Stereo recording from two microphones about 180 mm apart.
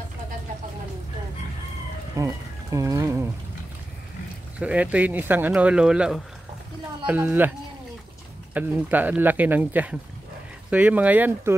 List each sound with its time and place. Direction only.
2.1 s a sound: 15° right (ahead or behind)
4.6 s speech: 5° right (ahead or behind)
8.5 s speech: 10° right (ahead or behind)